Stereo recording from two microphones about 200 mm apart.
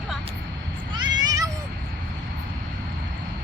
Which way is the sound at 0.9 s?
20° right (ahead or behind).